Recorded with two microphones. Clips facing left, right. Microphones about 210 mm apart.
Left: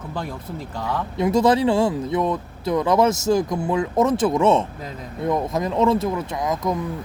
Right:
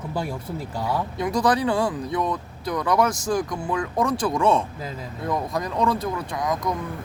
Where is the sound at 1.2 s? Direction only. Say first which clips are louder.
Left 6 dB; 25° left (ahead or behind).